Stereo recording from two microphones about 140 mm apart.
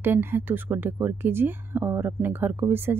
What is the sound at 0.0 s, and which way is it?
Speech, 15° right (ahead or behind).